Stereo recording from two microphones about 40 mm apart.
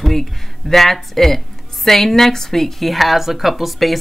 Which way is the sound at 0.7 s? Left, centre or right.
Centre.